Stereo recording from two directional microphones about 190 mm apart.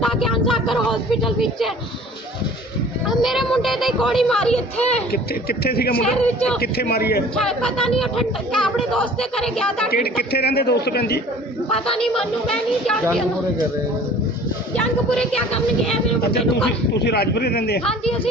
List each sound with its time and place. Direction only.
0.0 s a sound: centre (ahead or behind)
3.1 s speech: centre (ahead or behind)
5.1 s speech: 55° left (ahead or behind)
6.1 s speech: 5° left (ahead or behind)
6.6 s a man's voice: 55° left (ahead or behind)
7.3 s speech: centre (ahead or behind)
9.9 s a man's voice: 55° left (ahead or behind)
11.7 s speech: 5° left (ahead or behind)
14.8 s speech: 5° left (ahead or behind)
16.9 s a man's voice: 60° left (ahead or behind)